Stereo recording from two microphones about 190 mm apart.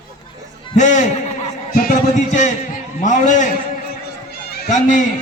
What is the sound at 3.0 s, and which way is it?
Speech, 40° left (ahead or behind).